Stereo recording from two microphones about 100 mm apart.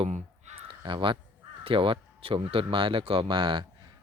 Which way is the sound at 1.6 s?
65° right (ahead or behind).